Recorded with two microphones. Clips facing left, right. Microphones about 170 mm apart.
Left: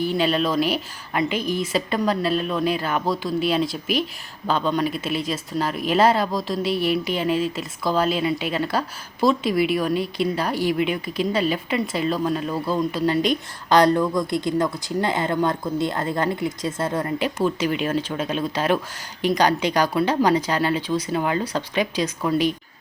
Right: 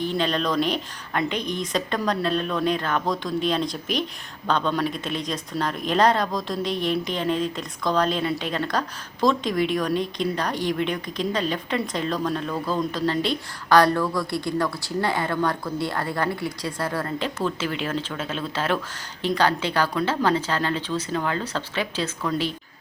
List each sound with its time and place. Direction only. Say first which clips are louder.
0.0 s speech: left 3 dB; 5° left (ahead or behind)